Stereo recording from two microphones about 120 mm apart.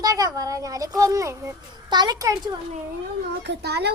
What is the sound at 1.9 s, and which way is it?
Speech, 35° right (ahead or behind).